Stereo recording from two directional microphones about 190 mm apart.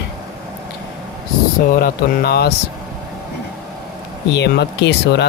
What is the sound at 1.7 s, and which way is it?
Speech, 55° left (ahead or behind).